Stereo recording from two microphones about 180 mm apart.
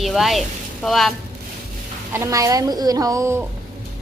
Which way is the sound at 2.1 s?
15° right (ahead or behind).